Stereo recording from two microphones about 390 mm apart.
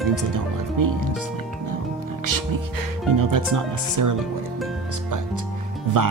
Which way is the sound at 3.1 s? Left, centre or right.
Right.